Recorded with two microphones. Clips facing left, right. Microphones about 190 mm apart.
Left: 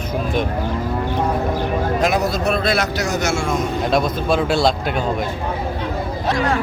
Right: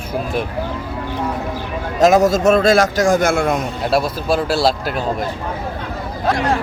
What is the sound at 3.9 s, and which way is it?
Speech, 5° right (ahead or behind).